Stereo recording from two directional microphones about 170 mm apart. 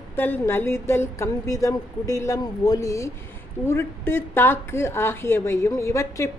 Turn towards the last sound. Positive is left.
turn(degrees=20)  # may be behind; listen again after turning